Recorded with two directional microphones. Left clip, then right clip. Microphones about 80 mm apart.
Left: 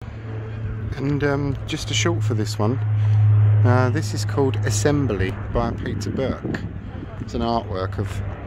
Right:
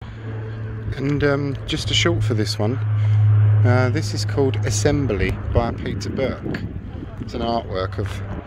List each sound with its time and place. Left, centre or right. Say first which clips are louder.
1.1 s speech: right 3 dB; centre
4.1 s speech: right 1 dB; left
5.0 s speech: right 2 dB; centre
5.9 s speech: right 2 dB; centre
7.7 s speech: right 2 dB; centre